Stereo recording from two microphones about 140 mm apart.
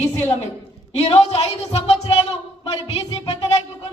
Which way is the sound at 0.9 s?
50° left (ahead or behind).